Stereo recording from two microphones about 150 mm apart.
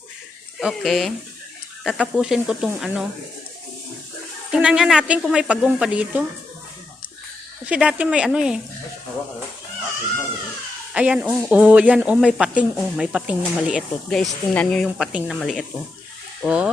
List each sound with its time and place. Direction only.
0.6 s speech: centre (ahead or behind)
4.5 s speech: 5° right (ahead or behind)
7.7 s speech: 5° right (ahead or behind)
10.9 s speech: 10° right (ahead or behind); by 14.8 s 5° left (ahead or behind)
14.8 s speech: 5° right (ahead or behind)